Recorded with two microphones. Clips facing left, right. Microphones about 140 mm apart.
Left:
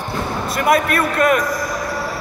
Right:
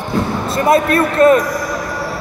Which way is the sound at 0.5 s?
30° right (ahead or behind).